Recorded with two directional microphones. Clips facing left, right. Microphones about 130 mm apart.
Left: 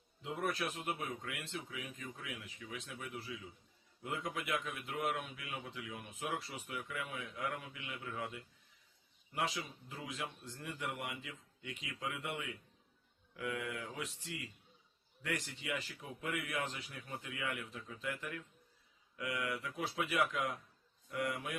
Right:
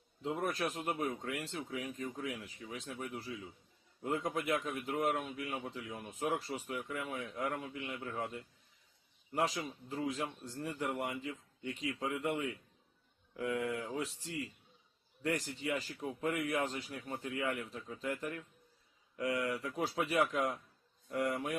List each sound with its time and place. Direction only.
0.2 s a man's voice: 35° right (ahead or behind)
9.6 s a man's voice: 35° right (ahead or behind)